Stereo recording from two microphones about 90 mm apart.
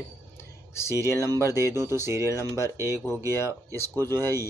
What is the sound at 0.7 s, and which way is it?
Speech, 30° left (ahead or behind).